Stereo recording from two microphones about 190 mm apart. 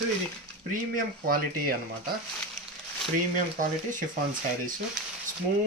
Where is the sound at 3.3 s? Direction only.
45° right (ahead or behind).